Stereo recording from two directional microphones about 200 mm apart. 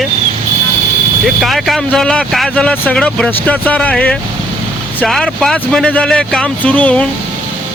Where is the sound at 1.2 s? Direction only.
Centre (ahead or behind).